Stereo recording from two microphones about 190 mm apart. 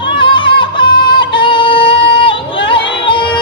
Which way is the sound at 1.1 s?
25° left (ahead or behind).